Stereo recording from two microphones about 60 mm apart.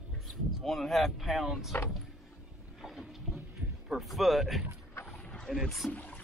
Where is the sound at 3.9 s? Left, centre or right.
Centre.